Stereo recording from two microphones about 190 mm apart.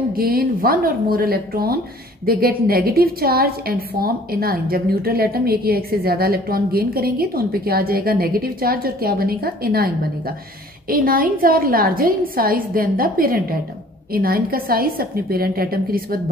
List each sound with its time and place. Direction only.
0.1 s a woman's voice: 50° right (ahead or behind)